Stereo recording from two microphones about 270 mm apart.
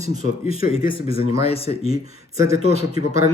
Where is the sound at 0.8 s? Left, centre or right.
Left.